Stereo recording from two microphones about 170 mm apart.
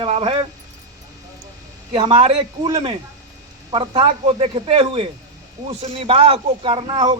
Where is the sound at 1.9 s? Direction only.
25° right (ahead or behind).